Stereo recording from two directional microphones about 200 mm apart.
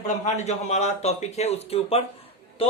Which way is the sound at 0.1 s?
35° left (ahead or behind).